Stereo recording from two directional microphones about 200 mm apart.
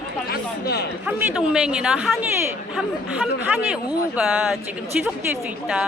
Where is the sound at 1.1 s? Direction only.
10° right (ahead or behind).